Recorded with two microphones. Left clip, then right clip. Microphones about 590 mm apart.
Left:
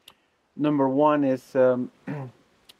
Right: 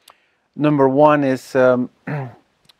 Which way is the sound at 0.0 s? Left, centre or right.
Right.